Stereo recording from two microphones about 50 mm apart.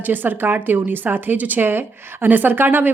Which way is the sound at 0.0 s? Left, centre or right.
Right.